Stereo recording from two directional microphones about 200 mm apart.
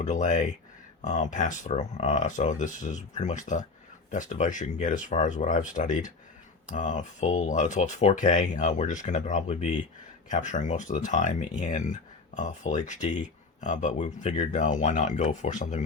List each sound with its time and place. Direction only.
0.0 s speech: 35° left (ahead or behind)